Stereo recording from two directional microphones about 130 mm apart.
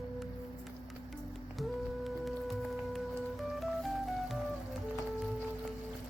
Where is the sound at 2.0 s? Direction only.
Centre (ahead or behind).